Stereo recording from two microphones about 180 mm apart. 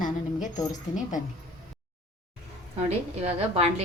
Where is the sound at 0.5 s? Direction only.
20° left (ahead or behind).